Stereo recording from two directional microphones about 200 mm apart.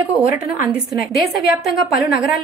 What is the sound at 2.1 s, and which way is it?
Speech, centre (ahead or behind).